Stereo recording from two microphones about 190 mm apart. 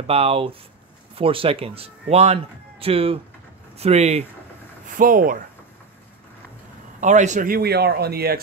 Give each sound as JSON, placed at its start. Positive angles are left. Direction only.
{"t": 0.0, "sound": "speech", "side_deg": -30}
{"t": 4.8, "sound": "a man's voice", "side_deg": -45}
{"t": 7.0, "sound": "a man's voice", "side_deg": -40}